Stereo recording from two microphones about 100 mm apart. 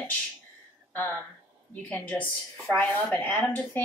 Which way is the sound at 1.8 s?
15° left (ahead or behind).